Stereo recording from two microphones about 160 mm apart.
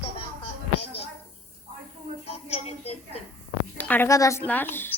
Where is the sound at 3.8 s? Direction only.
10° left (ahead or behind).